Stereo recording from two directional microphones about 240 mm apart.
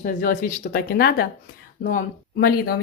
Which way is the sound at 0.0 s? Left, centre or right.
Left.